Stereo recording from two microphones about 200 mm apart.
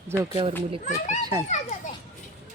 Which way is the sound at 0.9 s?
35° left (ahead or behind).